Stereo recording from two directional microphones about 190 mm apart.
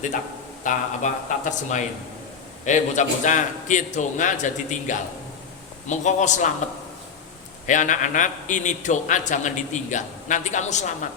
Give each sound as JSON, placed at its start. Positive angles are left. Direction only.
{"t": 0.6, "sound": "a man's voice", "side_deg": 40}
{"t": 7.7, "sound": "a man's voice", "side_deg": 40}